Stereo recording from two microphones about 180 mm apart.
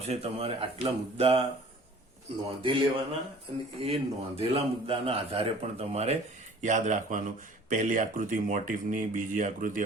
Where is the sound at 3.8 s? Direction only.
35° right (ahead or behind).